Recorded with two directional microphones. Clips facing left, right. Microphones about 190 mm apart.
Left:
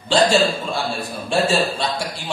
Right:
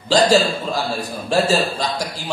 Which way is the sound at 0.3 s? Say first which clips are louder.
Right 2 dB; 40° right (ahead or behind).